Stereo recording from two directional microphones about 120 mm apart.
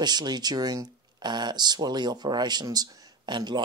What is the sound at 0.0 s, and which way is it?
Speech, 35° right (ahead or behind).